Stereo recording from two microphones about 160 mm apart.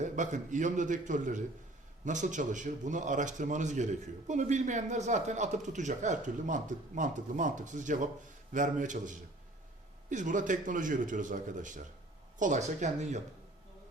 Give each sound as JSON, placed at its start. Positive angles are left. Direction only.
{"t": 0.0, "sound": "a man's voice", "side_deg": -50}